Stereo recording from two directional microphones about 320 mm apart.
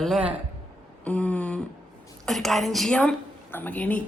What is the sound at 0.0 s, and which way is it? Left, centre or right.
Speech, centre.